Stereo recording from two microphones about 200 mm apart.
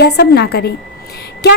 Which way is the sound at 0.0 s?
55° left (ahead or behind).